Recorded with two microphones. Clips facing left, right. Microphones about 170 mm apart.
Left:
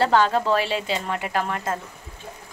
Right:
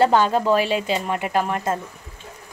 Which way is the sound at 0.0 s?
15° right (ahead or behind).